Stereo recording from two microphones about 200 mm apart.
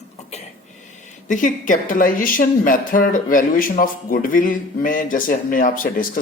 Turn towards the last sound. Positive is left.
turn(degrees=45)  # may be behind; listen again after turning